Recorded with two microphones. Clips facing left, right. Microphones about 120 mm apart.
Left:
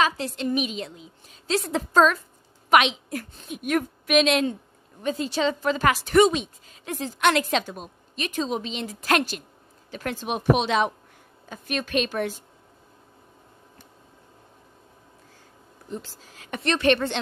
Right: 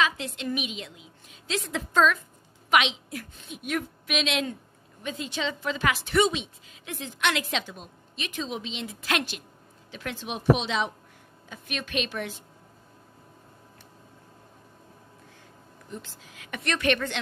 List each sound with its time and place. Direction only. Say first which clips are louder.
0.0 s a woman's voice: left 4 dB; 40° left (ahead or behind); by 10.9 s 55° left (ahead or behind)
11.4 s a woman's voice: left 6 dB; 45° left (ahead or behind)
15.9 s a woman's voice: left 5 dB; 35° left (ahead or behind)